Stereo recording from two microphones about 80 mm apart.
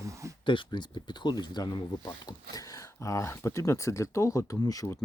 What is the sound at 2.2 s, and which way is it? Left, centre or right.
Speech, left.